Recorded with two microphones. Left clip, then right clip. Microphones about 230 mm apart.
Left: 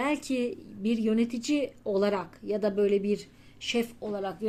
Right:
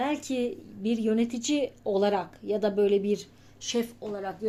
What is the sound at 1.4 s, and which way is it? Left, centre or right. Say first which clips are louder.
Speech: right 1 dB; left.